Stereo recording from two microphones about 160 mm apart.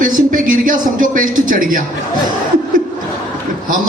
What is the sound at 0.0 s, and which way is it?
A man's voice, 55° right (ahead or behind).